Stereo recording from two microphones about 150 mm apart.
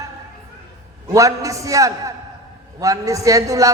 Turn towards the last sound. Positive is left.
turn(degrees=-20)  # may be behind; listen again after turning